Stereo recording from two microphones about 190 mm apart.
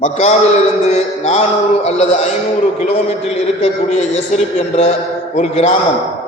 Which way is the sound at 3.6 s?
35° left (ahead or behind).